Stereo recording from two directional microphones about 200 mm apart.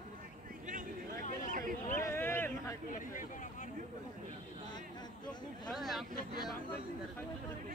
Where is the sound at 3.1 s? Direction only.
40° left (ahead or behind).